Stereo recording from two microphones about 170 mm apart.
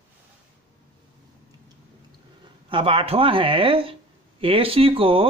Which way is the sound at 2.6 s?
30° right (ahead or behind).